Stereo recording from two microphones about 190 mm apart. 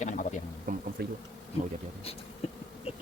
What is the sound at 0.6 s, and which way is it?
Insect, 50° right (ahead or behind).